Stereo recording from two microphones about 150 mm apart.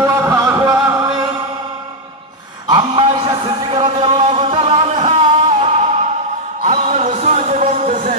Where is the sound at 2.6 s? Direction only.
35° right (ahead or behind).